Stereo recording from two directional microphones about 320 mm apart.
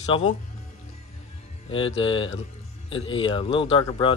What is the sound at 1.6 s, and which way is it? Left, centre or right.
Speech, centre.